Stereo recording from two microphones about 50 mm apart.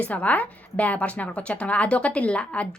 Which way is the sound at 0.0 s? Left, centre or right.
Left.